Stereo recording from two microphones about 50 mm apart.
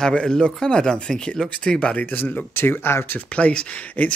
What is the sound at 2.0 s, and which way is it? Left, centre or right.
Speech, left.